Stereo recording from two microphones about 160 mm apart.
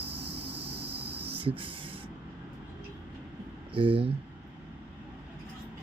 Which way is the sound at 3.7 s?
35° right (ahead or behind).